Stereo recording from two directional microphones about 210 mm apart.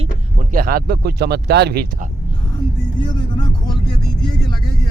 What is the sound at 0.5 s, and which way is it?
Speech, 45° right (ahead or behind).